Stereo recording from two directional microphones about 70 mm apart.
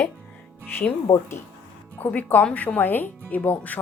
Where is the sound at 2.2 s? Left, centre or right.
Left.